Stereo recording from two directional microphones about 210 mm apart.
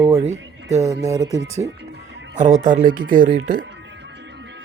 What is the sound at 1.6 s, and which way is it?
Speech, 10° right (ahead or behind).